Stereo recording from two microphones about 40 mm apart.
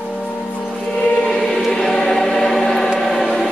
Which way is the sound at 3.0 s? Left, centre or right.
Centre.